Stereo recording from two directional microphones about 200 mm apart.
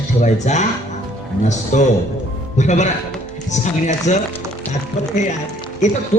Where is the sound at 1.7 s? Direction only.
40° left (ahead or behind).